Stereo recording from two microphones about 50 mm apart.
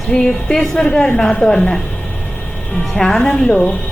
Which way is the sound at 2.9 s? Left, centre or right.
Centre.